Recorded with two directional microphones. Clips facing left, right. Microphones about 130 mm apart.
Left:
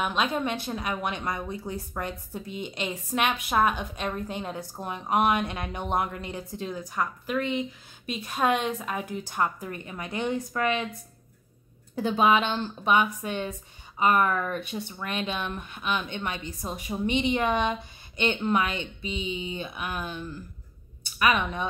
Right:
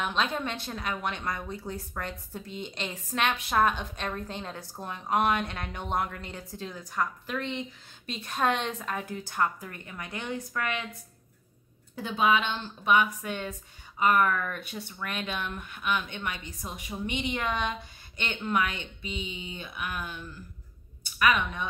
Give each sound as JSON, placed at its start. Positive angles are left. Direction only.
{"t": 0.0, "sound": "a woman's voice", "side_deg": 10}
{"t": 11.9, "sound": "speech", "side_deg": 35}